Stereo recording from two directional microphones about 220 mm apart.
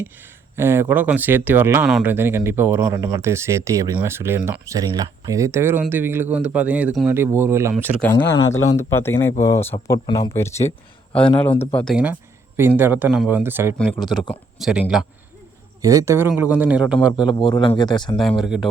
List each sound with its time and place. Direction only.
0.5 s speech: 10° right (ahead or behind)
8.0 s speech: 10° left (ahead or behind)
11.8 s speech: 5° left (ahead or behind)
12.5 s speech: 10° right (ahead or behind)
13.7 s speech: 5° left (ahead or behind)
15.8 s speech: 15° right (ahead or behind)
17.3 s speech: 20° left (ahead or behind)
18.2 s speech: centre (ahead or behind)